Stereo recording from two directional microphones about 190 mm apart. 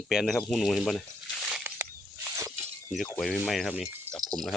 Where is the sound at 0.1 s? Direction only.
Centre (ahead or behind).